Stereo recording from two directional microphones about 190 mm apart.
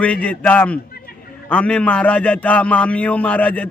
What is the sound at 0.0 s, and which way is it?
A man's voice, 5° left (ahead or behind).